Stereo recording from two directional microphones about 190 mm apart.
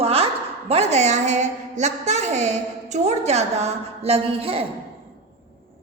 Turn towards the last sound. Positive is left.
turn(degrees=-30)  # may be behind; listen again after turning